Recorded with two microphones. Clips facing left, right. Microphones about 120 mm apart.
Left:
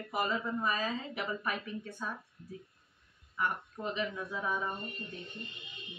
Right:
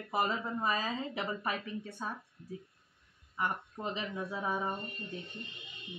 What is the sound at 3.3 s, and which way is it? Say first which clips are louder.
Speech: even; 25° right (ahead or behind).